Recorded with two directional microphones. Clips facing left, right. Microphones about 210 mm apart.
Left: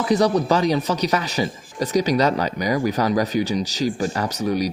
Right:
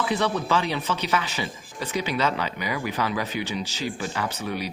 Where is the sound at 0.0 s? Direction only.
40° left (ahead or behind).